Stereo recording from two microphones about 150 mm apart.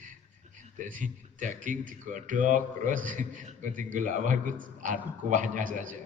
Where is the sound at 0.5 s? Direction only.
60° right (ahead or behind).